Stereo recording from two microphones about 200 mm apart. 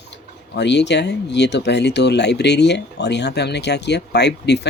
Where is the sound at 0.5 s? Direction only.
60° left (ahead or behind).